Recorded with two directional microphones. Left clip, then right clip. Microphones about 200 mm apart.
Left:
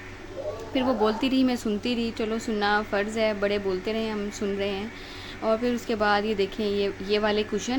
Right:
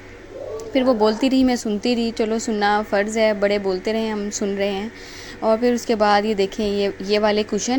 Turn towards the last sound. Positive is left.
turn(degrees=-25)  # may be behind; listen again after turning